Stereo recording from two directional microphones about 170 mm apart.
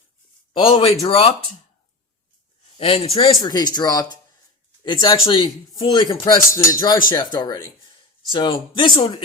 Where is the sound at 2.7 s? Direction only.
35° left (ahead or behind).